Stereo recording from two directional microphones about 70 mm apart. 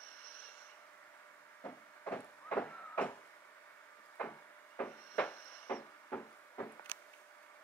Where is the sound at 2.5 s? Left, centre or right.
Left.